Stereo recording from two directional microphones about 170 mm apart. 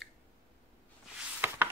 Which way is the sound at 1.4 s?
10° right (ahead or behind).